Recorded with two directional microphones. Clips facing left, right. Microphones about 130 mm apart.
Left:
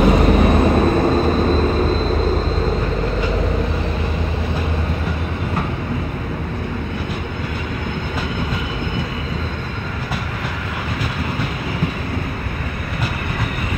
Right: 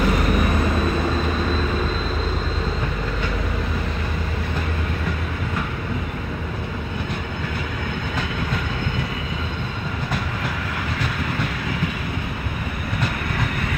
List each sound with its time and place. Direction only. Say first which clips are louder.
0.0 s vehicle: left 6 dB; 30° left (ahead or behind)